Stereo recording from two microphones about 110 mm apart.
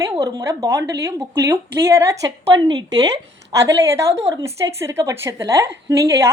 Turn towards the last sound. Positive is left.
turn(degrees=-25)  # may be behind; listen again after turning